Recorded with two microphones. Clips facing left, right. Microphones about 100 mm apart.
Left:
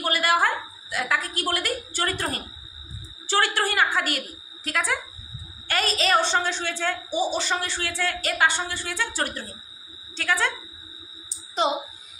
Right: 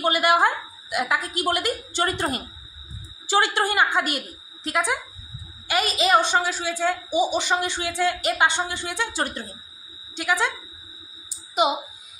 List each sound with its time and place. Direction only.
0.0 s a woman's voice: 20° right (ahead or behind)
11.6 s a woman's voice: 10° right (ahead or behind)